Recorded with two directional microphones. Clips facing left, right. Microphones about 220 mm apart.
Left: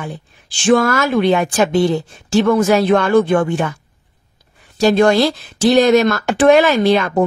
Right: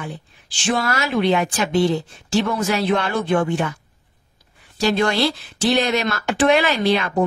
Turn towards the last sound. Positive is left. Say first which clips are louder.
# left 5 dB
turn(degrees=45)  # may be behind; listen again after turning